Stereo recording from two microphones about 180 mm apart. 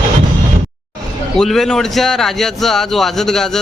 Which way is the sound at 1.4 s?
Centre (ahead or behind).